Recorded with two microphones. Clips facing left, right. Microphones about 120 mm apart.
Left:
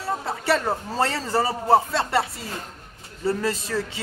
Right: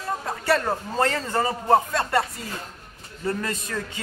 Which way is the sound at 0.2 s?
5° left (ahead or behind).